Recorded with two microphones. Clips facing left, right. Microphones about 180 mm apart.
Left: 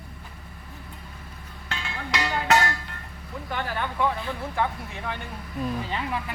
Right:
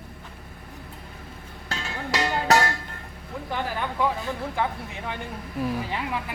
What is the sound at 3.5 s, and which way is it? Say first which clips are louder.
Speech: right 1 dB; 10° right (ahead or behind).